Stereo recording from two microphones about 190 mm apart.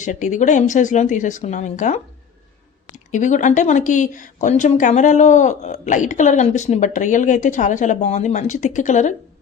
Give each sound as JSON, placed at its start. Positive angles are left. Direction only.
{"t": 0.0, "sound": "speech", "side_deg": 40}